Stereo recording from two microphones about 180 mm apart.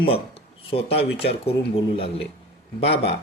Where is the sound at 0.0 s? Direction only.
30° left (ahead or behind).